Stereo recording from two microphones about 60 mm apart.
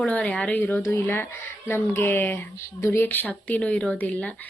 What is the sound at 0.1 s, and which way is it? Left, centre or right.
Speech, left.